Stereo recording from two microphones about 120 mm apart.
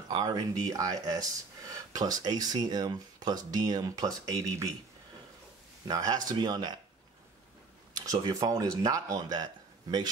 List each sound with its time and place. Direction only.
0.2 s speech: 35° right (ahead or behind)
5.9 s speech: 30° right (ahead or behind)
8.0 s speech: 30° right (ahead or behind)